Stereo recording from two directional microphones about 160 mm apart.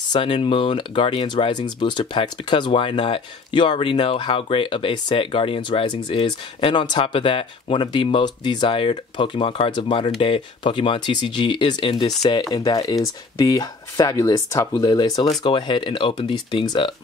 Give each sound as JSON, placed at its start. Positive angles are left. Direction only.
{"t": 0.1, "sound": "speech", "side_deg": 30}